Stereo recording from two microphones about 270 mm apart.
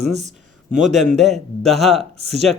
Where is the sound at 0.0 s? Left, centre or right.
Right.